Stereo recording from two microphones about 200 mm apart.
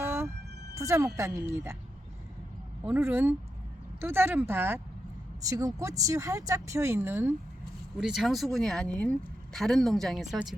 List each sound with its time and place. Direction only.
0.0 s a sound: 10° right (ahead or behind)
0.8 s speech: 15° right (ahead or behind)
2.8 s speech: 10° right (ahead or behind)